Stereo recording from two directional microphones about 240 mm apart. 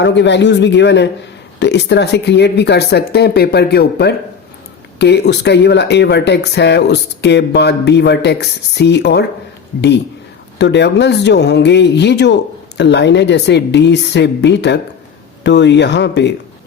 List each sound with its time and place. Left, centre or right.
0.0 s speech: left
10.6 s speech: left